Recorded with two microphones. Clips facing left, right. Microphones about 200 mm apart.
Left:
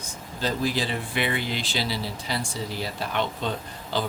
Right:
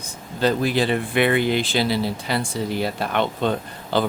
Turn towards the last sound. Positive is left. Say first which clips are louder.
# right 7 dB
turn(degrees=-60)  # may be behind; listen again after turning